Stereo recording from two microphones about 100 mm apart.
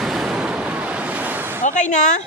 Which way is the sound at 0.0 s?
5° right (ahead or behind).